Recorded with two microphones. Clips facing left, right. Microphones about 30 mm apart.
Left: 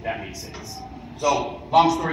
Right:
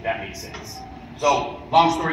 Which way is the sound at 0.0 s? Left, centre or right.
Centre.